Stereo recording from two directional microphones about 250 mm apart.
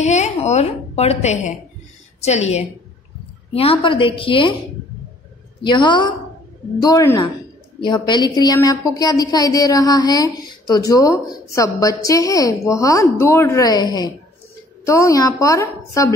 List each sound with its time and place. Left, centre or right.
0.0 s a woman's voice: left
5.6 s a woman's voice: centre